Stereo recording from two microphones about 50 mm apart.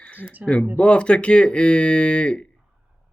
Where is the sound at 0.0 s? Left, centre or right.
Left.